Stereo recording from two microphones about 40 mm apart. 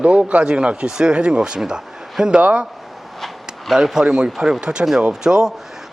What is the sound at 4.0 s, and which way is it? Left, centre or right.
Speech, centre.